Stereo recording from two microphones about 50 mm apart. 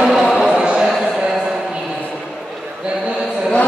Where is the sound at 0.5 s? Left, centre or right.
Centre.